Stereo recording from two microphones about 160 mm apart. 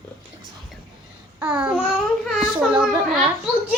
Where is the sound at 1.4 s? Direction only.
10° right (ahead or behind).